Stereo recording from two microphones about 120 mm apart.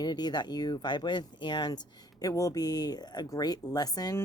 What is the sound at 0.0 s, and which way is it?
Speech, 35° left (ahead or behind).